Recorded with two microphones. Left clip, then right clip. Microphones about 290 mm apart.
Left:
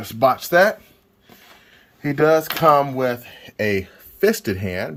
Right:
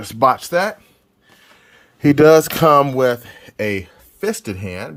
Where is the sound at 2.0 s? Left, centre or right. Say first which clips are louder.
Right 6 dB; right; by 3.7 s centre.